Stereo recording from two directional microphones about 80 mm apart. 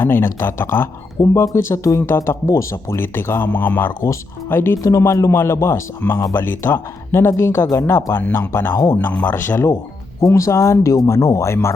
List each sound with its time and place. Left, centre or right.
0.0 s speech: left
4.8 s speech: left
8.7 s speech: left
9.3 s speech: left